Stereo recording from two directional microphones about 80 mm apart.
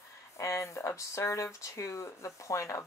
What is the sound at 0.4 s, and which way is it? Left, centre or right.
Speech, left.